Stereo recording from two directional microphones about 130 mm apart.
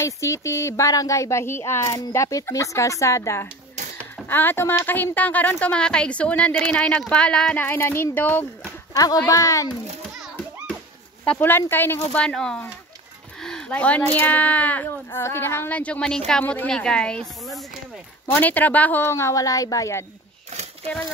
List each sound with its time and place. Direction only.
0.0 s a woman's voice: 20° left (ahead or behind)
8.9 s speech: 30° left (ahead or behind)
11.2 s a woman's voice: 15° left (ahead or behind)
13.4 s a sound: 5° left (ahead or behind)
14.2 s a woman's voice: 10° left (ahead or behind)
18.2 s speech: 15° left (ahead or behind)